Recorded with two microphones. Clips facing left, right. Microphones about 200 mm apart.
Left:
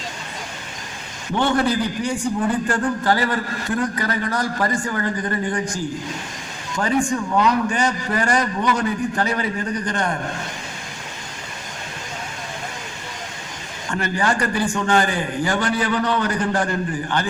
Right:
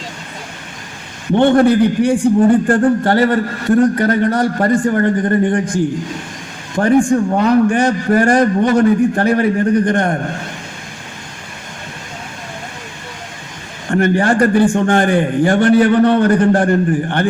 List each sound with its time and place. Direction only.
1.3 s a man's voice: 55° right (ahead or behind)
13.9 s a man's voice: 55° right (ahead or behind)